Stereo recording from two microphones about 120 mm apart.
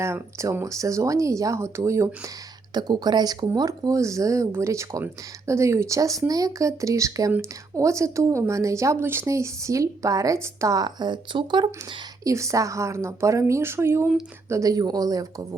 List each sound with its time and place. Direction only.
0.0 s speech: 25° right (ahead or behind)
2.7 s speech: 35° right (ahead or behind)
12.2 s speech: 25° right (ahead or behind)